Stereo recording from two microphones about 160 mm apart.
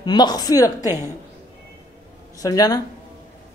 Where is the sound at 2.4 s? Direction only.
20° left (ahead or behind).